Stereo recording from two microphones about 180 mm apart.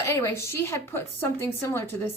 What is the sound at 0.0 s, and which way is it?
Speech, 15° left (ahead or behind).